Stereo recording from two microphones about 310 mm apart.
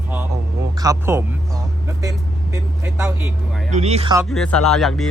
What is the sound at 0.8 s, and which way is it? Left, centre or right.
Speech, centre.